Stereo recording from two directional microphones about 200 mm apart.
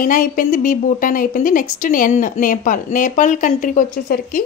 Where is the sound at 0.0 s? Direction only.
40° left (ahead or behind).